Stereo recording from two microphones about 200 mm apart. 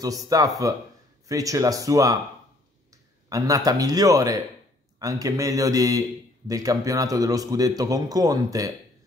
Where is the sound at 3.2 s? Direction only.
15° right (ahead or behind).